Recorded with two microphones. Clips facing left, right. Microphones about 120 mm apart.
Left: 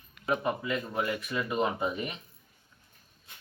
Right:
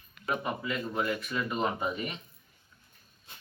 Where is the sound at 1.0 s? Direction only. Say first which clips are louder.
Even; 10° left (ahead or behind).